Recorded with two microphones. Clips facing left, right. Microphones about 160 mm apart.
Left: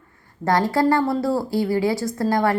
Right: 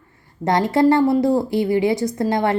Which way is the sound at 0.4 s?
20° right (ahead or behind).